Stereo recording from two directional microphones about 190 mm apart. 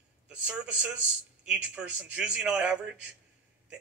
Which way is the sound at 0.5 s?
5° right (ahead or behind).